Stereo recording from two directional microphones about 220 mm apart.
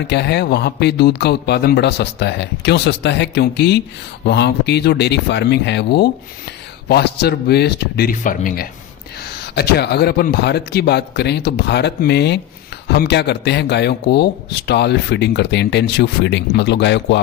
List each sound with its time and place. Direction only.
0.1 s speech: 50° left (ahead or behind)